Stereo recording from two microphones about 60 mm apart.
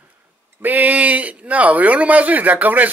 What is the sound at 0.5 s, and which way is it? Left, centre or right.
Speech, right.